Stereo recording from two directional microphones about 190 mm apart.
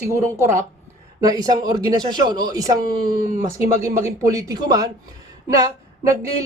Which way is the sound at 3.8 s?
15° right (ahead or behind).